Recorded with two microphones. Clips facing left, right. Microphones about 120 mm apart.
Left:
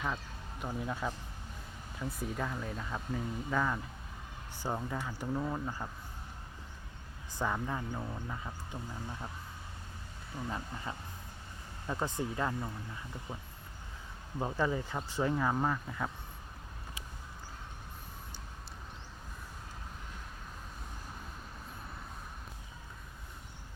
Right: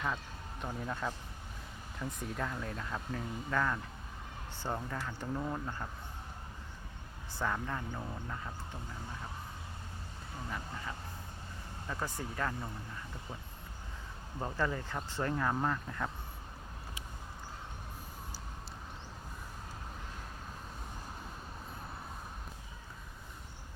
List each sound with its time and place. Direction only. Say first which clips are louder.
0.6 s speech: left 1 dB; 5° left (ahead or behind)
7.3 s speech: left 1 dB; 10° left (ahead or behind)
11.9 s speech: left 4 dB; 20° left (ahead or behind)
14.3 s speech: left 3 dB; 15° left (ahead or behind)